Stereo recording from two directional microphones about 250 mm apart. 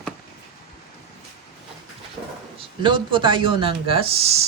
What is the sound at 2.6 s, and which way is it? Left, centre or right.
Speech, centre.